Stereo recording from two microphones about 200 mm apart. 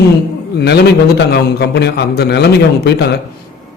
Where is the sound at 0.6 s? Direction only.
55° left (ahead or behind).